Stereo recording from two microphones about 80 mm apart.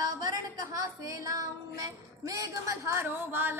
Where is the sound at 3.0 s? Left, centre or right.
Right.